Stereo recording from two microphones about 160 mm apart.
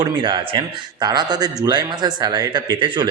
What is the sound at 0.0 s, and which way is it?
Speech, 30° right (ahead or behind).